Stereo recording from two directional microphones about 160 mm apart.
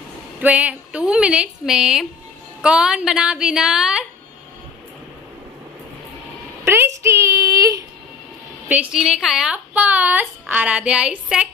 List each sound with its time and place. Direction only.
0.4 s a woman's voice: 10° right (ahead or behind)
6.6 s a sound: 15° right (ahead or behind)
8.6 s a woman's voice: 5° right (ahead or behind)